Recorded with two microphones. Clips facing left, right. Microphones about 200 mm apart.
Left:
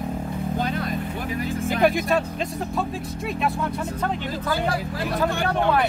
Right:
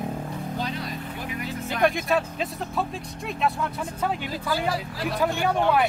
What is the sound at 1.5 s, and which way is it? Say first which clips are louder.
Speech: left 6 dB; 50° left (ahead or behind).